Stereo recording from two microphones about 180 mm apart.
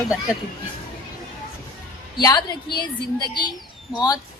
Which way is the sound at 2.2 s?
20° left (ahead or behind).